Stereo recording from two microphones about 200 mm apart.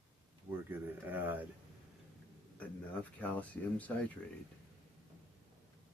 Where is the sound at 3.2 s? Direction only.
5° left (ahead or behind).